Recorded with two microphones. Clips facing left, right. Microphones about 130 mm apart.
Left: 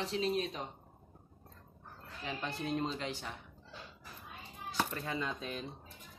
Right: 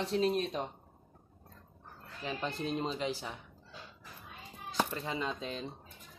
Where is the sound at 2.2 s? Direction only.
20° right (ahead or behind).